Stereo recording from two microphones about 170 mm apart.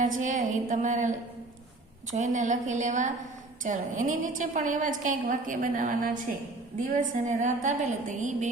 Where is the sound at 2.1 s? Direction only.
45° right (ahead or behind).